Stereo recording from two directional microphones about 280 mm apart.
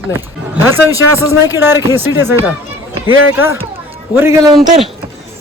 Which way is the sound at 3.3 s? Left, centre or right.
Centre.